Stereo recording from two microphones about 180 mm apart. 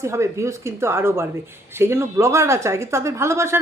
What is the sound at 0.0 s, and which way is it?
A woman's voice, 15° right (ahead or behind).